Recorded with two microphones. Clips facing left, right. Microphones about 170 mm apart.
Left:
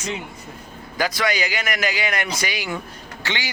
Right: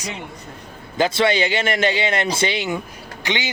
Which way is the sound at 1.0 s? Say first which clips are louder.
Right 5 dB; 25° right (ahead or behind).